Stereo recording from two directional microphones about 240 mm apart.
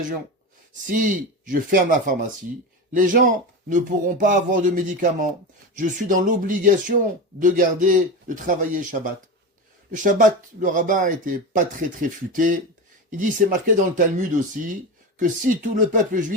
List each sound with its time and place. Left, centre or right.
0.9 s speech: right